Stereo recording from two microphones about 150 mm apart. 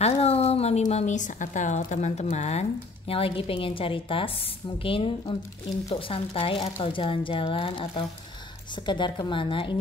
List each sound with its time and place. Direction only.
0.0 s a woman's voice: 45° left (ahead or behind)